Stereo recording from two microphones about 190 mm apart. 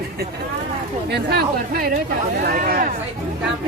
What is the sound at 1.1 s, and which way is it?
A woman's voice, 60° right (ahead or behind).